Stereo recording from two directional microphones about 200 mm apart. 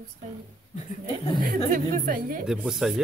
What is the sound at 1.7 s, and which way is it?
Speech, 45° right (ahead or behind).